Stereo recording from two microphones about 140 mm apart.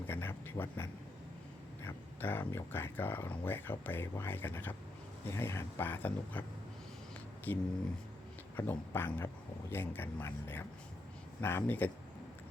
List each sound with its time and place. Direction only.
0.1 s speech: 15° left (ahead or behind)
7.5 s speech: 15° left (ahead or behind)